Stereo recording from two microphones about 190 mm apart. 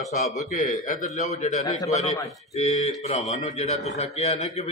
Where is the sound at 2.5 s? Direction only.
35° left (ahead or behind).